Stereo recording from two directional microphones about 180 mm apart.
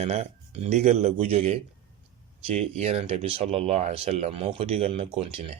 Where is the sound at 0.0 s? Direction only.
35° right (ahead or behind).